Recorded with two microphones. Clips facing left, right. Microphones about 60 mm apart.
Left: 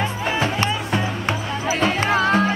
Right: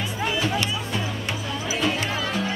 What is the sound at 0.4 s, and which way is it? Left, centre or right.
Music, left.